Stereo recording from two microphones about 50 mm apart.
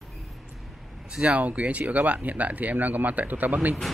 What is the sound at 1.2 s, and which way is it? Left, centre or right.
Speech, right.